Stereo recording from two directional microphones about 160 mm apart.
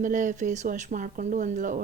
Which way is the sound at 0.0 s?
55° right (ahead or behind).